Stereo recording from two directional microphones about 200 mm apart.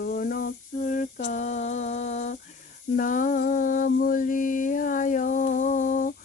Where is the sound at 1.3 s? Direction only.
35° left (ahead or behind).